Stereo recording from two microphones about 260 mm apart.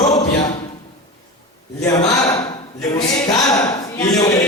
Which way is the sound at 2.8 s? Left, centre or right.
Centre.